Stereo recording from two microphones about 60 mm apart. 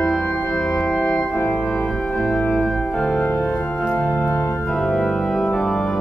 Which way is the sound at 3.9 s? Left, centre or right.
Centre.